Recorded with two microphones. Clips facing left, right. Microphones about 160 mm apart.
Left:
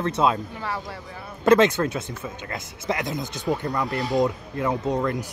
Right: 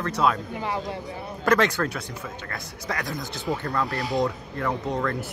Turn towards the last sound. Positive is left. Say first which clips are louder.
# left 3 dB
turn(degrees=20)  # may be behind; listen again after turning